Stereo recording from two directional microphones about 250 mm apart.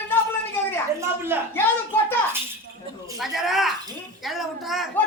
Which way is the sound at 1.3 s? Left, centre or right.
Centre.